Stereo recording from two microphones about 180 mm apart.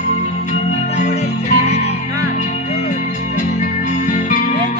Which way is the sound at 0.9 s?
35° left (ahead or behind).